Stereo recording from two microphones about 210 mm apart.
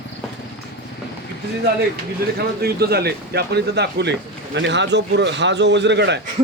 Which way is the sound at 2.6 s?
50° right (ahead or behind).